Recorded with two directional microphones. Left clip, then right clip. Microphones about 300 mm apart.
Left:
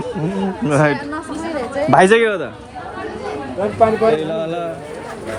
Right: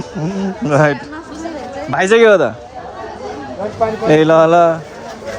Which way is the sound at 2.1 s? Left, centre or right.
Centre.